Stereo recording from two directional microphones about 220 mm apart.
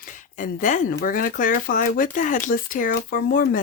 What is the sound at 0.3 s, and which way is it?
Speech, 35° left (ahead or behind).